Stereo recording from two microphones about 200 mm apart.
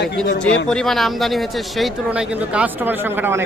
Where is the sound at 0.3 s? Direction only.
80° left.